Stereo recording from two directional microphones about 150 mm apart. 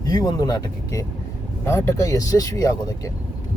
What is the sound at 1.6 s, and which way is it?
Speech, 20° left (ahead or behind).